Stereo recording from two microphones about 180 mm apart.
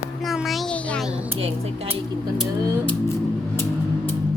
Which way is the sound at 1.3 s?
35° right (ahead or behind).